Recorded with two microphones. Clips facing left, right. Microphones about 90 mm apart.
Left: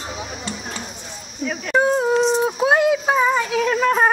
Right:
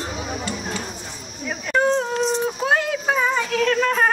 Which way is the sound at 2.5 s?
15° left (ahead or behind).